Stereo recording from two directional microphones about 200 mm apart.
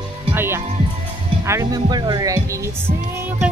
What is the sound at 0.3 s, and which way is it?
Music, 10° right (ahead or behind).